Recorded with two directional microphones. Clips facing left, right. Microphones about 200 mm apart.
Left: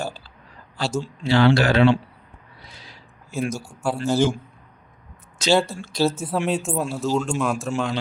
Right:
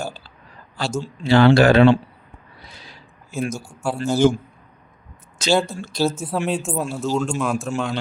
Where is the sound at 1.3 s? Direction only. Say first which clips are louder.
Right 4 dB; 50° right (ahead or behind).